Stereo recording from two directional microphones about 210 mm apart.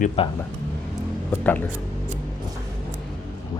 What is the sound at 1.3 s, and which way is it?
Speech, 10° left (ahead or behind).